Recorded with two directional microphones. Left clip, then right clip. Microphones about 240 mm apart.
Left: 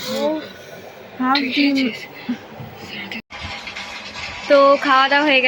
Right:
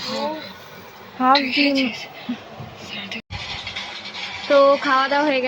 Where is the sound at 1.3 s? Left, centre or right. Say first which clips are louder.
Right 2 dB; right.